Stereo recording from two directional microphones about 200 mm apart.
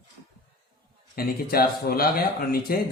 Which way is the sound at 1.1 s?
50° left (ahead or behind).